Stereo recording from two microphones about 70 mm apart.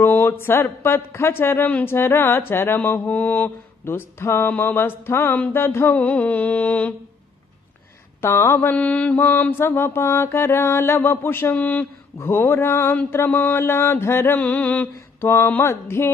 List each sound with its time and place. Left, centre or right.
0.0 s mantra: left
3.1 s mantra: left
5.9 s mantra: left
8.2 s mantra: left
11.5 s mantra: left
14.4 s mantra: left